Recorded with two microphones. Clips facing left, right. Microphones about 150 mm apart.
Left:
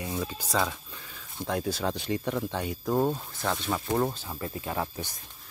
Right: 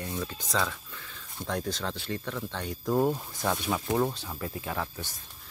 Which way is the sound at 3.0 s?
10° right (ahead or behind).